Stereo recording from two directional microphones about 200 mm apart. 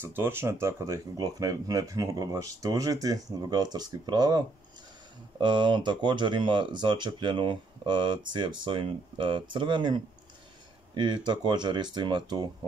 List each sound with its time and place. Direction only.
0.0 s speech: 10° right (ahead or behind)